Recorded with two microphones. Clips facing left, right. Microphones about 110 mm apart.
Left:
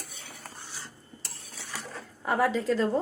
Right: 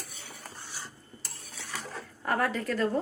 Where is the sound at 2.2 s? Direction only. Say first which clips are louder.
Left 3 dB; 10° left (ahead or behind).